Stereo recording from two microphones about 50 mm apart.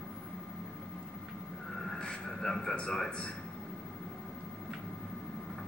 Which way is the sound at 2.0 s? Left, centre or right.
Centre.